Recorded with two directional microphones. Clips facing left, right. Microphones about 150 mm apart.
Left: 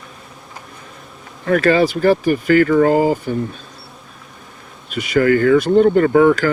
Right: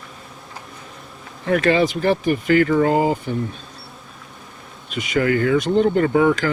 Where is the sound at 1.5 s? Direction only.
45° left (ahead or behind).